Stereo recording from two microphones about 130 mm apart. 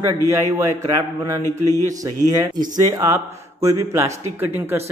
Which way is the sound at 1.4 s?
20° left (ahead or behind).